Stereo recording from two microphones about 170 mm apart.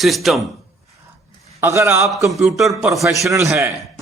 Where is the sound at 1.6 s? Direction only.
15° right (ahead or behind).